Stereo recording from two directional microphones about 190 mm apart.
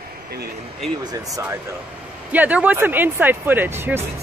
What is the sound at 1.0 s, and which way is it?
Speech, 20° right (ahead or behind).